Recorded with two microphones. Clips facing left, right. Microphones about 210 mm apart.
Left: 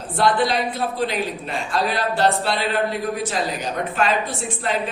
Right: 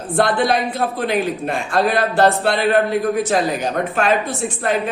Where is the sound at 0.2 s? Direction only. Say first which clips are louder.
Right 2 dB; 50° right (ahead or behind).